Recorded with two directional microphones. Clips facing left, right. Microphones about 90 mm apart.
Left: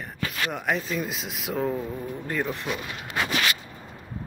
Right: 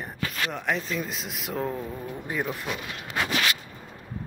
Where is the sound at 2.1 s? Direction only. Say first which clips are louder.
Left 1 dB; 10° right (ahead or behind).